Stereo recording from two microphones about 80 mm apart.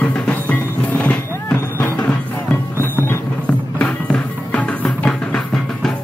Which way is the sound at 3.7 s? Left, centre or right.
Centre.